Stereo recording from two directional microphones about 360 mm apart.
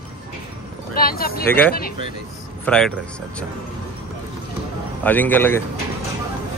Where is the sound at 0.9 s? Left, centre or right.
Left.